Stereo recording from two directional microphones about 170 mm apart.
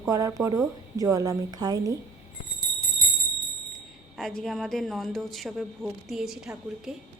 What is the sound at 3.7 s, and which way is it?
A woman's voice, centre (ahead or behind).